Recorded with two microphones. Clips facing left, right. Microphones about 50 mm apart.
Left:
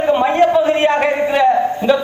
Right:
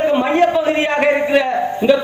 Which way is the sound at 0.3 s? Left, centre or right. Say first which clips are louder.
Left 2 dB; right.